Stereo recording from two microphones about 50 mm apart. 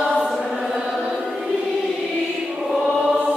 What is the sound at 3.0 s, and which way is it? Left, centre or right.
Music, right.